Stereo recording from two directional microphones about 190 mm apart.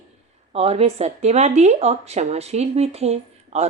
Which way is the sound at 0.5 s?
30° right (ahead or behind).